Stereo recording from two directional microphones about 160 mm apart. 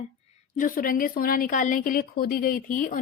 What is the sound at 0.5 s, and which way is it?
A woman's voice, 60° left (ahead or behind).